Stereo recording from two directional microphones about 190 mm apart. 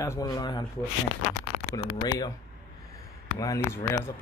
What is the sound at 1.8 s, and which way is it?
Speech, 20° left (ahead or behind).